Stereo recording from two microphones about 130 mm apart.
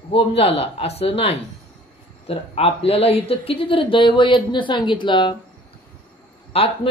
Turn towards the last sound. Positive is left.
turn(degrees=50)  # may be behind; listen again after turning